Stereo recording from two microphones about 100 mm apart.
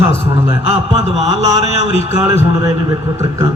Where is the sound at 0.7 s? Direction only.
90° right.